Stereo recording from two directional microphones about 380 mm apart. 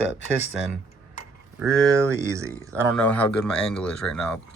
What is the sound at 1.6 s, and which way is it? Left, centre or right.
Speech, centre.